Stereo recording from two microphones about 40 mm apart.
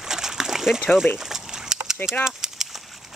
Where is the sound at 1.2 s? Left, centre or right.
Centre.